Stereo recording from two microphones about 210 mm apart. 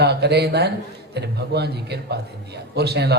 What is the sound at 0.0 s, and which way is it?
A man's voice, 50° right (ahead or behind).